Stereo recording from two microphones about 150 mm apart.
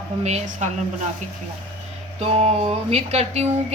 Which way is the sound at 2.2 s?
45° right (ahead or behind).